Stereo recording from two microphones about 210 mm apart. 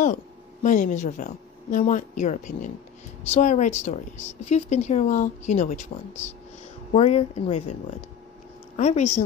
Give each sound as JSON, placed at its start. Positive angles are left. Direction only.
{"t": 0.0, "sound": "a woman's voice", "side_deg": 35}
{"t": 8.7, "sound": "speech", "side_deg": 35}